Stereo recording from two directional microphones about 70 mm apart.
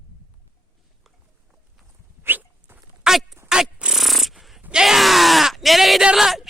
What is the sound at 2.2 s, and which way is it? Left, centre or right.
Dog, right.